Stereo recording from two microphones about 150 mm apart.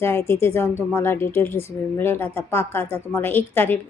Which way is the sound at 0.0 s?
15° left (ahead or behind).